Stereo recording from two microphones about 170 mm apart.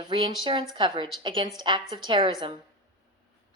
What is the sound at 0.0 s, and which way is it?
A woman's voice, 25° right (ahead or behind).